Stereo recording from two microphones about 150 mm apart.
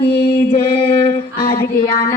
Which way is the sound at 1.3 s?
70° left (ahead or behind).